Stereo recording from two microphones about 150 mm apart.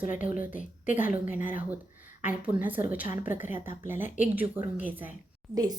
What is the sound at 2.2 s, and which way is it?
A woman's voice, 10° right (ahead or behind).